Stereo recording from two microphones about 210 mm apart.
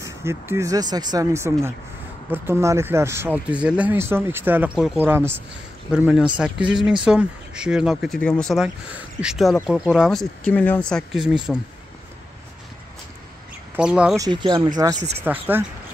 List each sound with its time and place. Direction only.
0.0 s speech: 10° right (ahead or behind)
13.7 s speech: 5° right (ahead or behind)
14.1 s speech: 20° right (ahead or behind)